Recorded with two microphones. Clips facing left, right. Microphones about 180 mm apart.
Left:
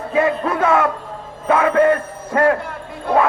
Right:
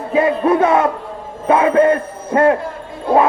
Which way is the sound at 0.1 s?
25° right (ahead or behind).